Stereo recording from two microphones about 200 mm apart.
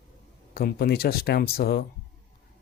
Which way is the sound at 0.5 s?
50° left (ahead or behind).